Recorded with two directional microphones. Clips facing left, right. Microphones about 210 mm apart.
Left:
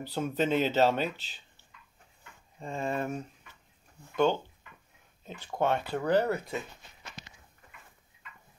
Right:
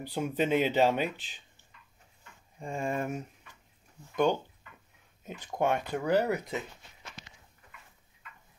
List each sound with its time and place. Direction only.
0.0 s speech: 15° right (ahead or behind)
2.6 s speech: 15° right (ahead or behind)